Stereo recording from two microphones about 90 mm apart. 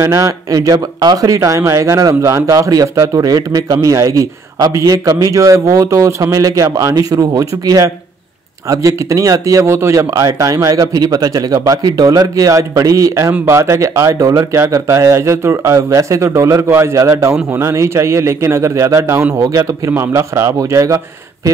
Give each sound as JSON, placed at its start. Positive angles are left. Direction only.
{"t": 0.0, "sound": "speech", "side_deg": -35}